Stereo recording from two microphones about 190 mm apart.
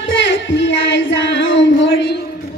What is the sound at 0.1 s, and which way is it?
Child singing, 70° left (ahead or behind).